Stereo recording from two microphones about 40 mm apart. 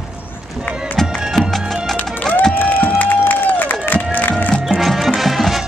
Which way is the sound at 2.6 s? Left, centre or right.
Left.